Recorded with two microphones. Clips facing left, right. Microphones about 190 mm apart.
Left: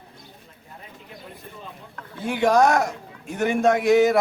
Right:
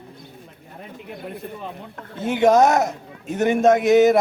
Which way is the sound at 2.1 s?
20° right (ahead or behind).